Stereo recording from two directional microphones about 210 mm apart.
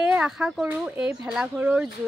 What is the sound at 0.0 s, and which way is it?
Speech, 5° right (ahead or behind).